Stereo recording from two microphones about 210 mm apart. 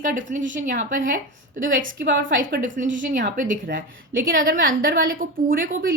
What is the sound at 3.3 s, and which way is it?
Speech, 40° right (ahead or behind).